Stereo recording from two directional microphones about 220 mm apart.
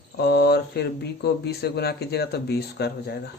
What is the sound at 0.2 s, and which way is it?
Speech, 45° left (ahead or behind).